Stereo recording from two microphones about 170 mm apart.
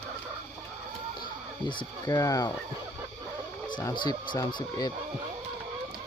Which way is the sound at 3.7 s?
20° left (ahead or behind).